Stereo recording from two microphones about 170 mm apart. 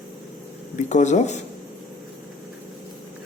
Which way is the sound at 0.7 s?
45° left (ahead or behind).